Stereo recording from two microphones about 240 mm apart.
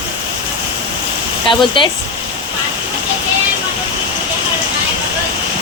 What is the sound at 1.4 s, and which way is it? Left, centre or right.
Speech, left.